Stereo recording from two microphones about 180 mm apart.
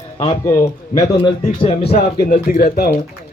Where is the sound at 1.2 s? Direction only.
35° left (ahead or behind).